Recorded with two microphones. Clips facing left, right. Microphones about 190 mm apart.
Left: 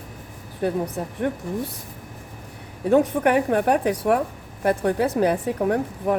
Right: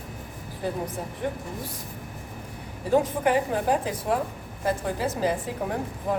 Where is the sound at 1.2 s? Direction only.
65° left (ahead or behind).